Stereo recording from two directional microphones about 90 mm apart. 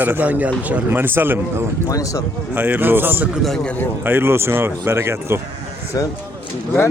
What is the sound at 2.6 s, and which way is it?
Speech, 20° right (ahead or behind).